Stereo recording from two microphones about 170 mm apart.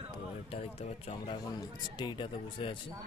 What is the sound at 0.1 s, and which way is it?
A man's voice, 35° left (ahead or behind).